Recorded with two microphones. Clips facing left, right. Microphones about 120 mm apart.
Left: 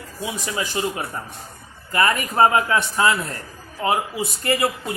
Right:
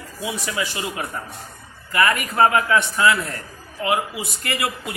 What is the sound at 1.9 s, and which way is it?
A man's voice, 30° left (ahead or behind).